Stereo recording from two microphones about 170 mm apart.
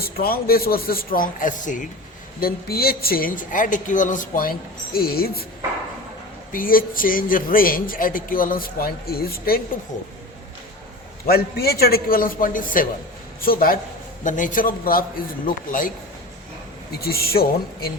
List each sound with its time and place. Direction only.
0.0 s speech: 65° left (ahead or behind)
2.4 s speech: 65° left (ahead or behind)
6.5 s speech: 55° left (ahead or behind)
11.3 s speech: 65° left (ahead or behind)
16.9 s speech: 65° left (ahead or behind)